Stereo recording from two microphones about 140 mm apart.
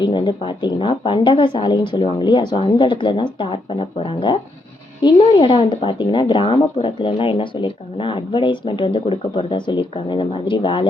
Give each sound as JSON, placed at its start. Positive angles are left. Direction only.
{"t": 0.0, "sound": "speech", "side_deg": 35}